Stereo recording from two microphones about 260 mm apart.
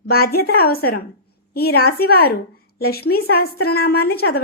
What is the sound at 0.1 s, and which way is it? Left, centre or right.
A woman's voice, left.